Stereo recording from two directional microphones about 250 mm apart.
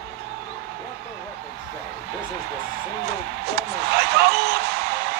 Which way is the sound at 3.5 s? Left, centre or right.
Right.